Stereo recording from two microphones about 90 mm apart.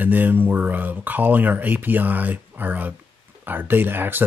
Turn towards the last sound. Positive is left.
turn(degrees=-25)  # may be behind; listen again after turning